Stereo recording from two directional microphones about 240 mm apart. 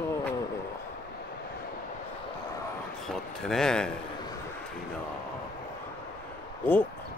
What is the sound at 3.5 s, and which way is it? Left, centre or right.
Speech, centre.